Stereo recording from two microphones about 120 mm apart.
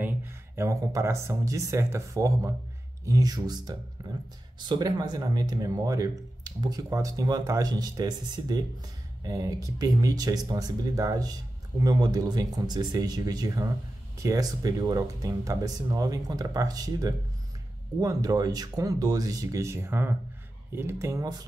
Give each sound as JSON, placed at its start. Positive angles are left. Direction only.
{"t": 0.0, "sound": "speech", "side_deg": -20}
{"t": 4.0, "sound": "a sound", "side_deg": -35}
{"t": 4.6, "sound": "speech", "side_deg": -35}